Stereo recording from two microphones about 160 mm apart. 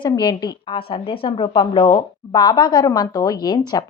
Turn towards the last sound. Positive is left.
turn(degrees=25)  # may be behind; listen again after turning